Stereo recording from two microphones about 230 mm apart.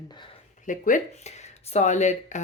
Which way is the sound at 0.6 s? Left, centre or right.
Left.